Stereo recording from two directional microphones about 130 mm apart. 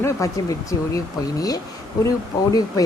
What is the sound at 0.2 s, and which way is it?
Speech, 25° left (ahead or behind).